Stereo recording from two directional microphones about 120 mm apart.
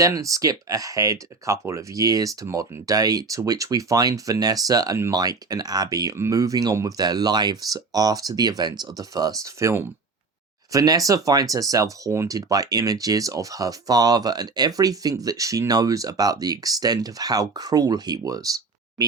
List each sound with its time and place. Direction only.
0.0 s speech: 30° right (ahead or behind)